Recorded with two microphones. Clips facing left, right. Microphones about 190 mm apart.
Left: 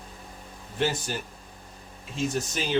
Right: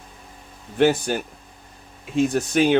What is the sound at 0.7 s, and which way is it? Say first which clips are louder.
Speech: right 10 dB; 65° right (ahead or behind).